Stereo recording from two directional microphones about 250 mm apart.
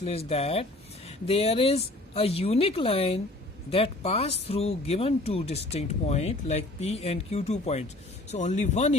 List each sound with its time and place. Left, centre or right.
0.0 s speech: left